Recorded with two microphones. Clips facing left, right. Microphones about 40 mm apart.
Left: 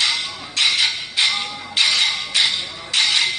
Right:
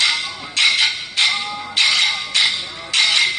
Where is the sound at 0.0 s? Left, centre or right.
Right.